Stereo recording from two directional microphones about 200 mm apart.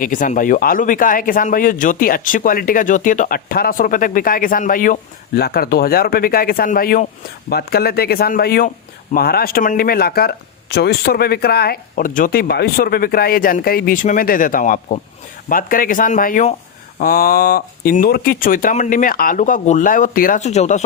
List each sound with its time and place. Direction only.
0.0 s speech: 40° left (ahead or behind)